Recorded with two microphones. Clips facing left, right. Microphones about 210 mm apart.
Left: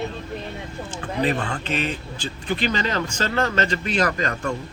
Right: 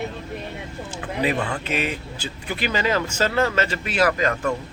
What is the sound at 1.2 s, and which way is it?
Speech, 10° right (ahead or behind).